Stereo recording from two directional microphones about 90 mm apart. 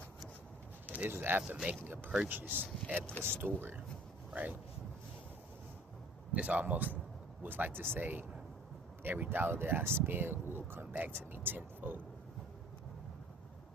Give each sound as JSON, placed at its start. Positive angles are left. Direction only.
{"t": 0.9, "sound": "speech", "side_deg": -20}
{"t": 1.5, "sound": "speech", "side_deg": -10}
{"t": 1.8, "sound": "speech", "side_deg": -25}
{"t": 6.3, "sound": "speech", "side_deg": -15}